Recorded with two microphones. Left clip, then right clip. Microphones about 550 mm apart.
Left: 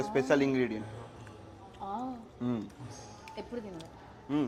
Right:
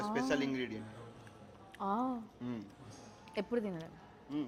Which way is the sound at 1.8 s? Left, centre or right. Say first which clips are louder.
Right 2 dB; right.